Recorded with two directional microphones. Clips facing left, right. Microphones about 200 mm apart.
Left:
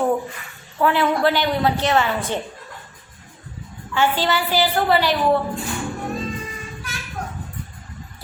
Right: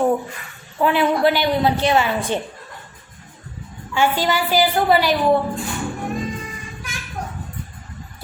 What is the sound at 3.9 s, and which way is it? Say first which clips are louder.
A woman's voice: right 1 dB; 10° right (ahead or behind).